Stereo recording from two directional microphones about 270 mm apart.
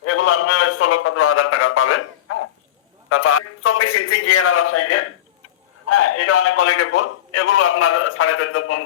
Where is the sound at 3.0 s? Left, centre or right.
Left.